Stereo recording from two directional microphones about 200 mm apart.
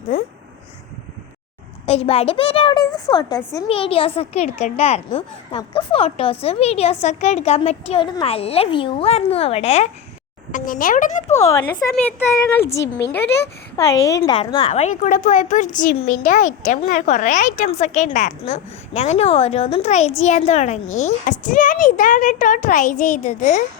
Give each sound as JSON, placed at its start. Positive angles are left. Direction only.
{"t": 1.9, "sound": "a woman's voice", "side_deg": 30}
{"t": 10.5, "sound": "speech", "side_deg": 45}
{"t": 11.5, "sound": "speech", "side_deg": 15}
{"t": 13.0, "sound": "speech", "side_deg": 60}
{"t": 14.1, "sound": "a woman's voice", "side_deg": 20}
{"t": 14.7, "sound": "speech", "side_deg": 35}